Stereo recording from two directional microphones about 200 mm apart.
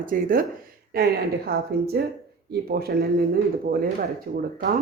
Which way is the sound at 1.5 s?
50° right (ahead or behind).